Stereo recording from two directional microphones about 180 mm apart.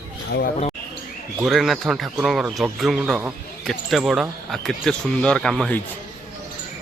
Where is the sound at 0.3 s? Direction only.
60° left (ahead or behind).